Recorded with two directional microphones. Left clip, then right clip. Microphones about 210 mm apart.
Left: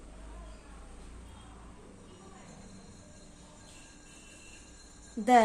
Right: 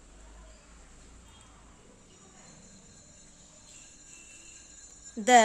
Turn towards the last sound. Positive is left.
turn(degrees=-45)  # may be behind; listen again after turning